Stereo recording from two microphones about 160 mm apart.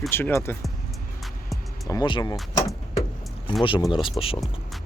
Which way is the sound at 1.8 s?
25° left (ahead or behind).